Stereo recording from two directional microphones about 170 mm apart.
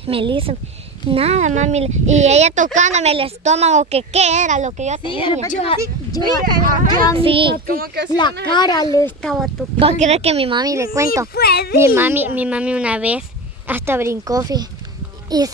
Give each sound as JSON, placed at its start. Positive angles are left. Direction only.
{"t": 0.0, "sound": "speech", "side_deg": -30}
{"t": 5.1, "sound": "speech", "side_deg": 30}
{"t": 6.2, "sound": "a woman's voice", "side_deg": 20}
{"t": 6.6, "sound": "speech", "side_deg": -55}
{"t": 7.2, "sound": "speech", "side_deg": -30}
{"t": 7.6, "sound": "speech", "side_deg": -60}
{"t": 8.1, "sound": "a woman's voice", "side_deg": 25}
{"t": 9.2, "sound": "speech", "side_deg": 0}
{"t": 9.8, "sound": "speech", "side_deg": -40}
{"t": 10.6, "sound": "speech", "side_deg": -20}
{"t": 11.3, "sound": "a child's voice", "side_deg": 65}
{"t": 11.7, "sound": "speech", "side_deg": -15}